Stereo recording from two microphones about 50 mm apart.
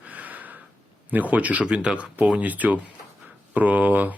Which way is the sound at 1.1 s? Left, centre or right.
Right.